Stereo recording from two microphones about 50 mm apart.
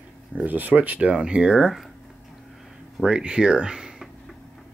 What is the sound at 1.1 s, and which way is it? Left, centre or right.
Speech, centre.